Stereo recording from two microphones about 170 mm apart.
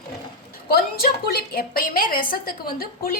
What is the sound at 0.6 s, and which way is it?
A woman's voice, 65° left (ahead or behind).